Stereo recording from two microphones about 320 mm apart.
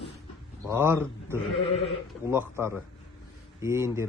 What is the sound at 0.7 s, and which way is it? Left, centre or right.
Speech, centre.